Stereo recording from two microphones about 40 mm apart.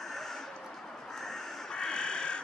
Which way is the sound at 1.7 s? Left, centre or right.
Left.